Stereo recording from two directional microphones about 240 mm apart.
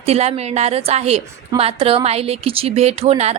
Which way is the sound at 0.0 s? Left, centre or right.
Right.